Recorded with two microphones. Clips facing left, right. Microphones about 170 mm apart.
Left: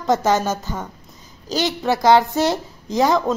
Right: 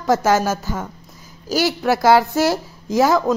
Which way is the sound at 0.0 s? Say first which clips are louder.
Right 1 dB; 5° right (ahead or behind).